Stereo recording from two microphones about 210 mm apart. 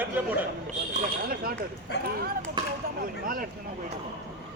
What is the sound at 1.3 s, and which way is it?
Speech, 45° right (ahead or behind).